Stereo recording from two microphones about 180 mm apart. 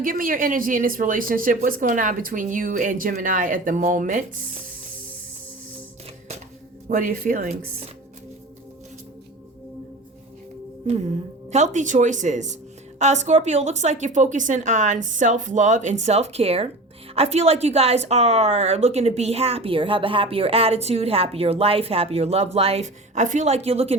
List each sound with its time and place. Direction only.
0.0 s speech: 50° right (ahead or behind)
6.8 s speech: 50° right (ahead or behind)
10.8 s a woman's voice: 35° right (ahead or behind)